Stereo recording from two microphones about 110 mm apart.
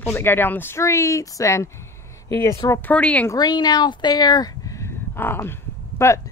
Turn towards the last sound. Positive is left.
turn(degrees=25)  # may be behind; listen again after turning